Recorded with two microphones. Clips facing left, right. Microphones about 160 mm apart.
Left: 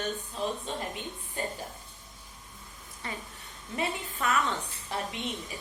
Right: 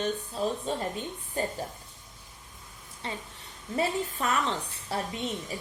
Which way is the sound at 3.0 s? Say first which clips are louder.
Right 2 dB; 25° right (ahead or behind).